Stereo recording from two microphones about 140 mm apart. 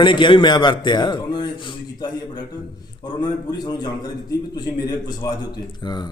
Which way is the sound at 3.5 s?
30° left (ahead or behind).